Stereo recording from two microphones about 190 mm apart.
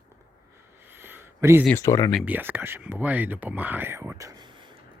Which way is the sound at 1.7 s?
15° left (ahead or behind).